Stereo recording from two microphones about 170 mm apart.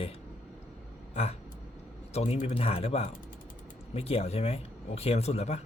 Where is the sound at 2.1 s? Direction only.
40° left (ahead or behind).